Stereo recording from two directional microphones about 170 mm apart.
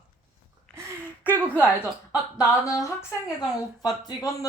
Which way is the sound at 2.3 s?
20° left (ahead or behind).